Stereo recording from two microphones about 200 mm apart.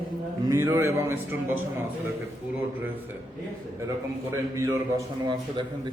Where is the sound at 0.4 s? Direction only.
15° right (ahead or behind).